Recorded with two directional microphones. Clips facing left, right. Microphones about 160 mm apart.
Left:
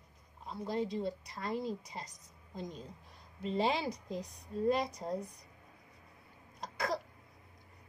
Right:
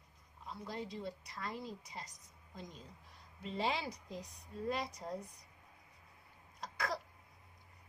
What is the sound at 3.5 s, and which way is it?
Speech, 25° left (ahead or behind).